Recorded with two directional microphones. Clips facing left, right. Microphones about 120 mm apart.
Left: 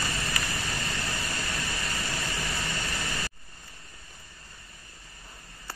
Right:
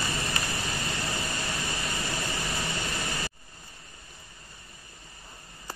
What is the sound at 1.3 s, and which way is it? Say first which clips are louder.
Vehicle: right 1 dB; 15° right (ahead or behind).